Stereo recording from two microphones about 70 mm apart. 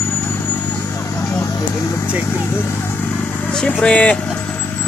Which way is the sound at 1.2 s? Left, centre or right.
Left.